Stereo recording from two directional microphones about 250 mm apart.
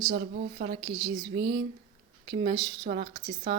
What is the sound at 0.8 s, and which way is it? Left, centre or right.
Speech, centre.